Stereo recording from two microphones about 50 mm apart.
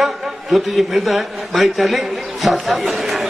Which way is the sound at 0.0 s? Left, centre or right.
Centre.